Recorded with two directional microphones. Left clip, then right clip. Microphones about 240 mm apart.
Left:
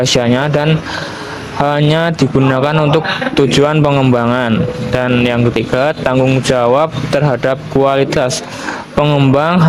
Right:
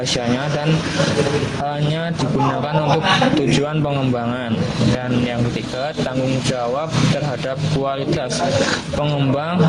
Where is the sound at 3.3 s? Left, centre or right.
Left.